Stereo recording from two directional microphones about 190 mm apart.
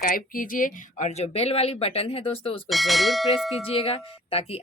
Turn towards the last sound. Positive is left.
turn(degrees=30)  # may be behind; listen again after turning